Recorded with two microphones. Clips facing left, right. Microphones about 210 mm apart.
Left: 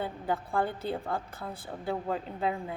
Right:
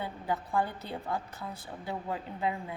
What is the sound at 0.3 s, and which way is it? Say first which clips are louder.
A woman's voice: left 1 dB; 30° left (ahead or behind).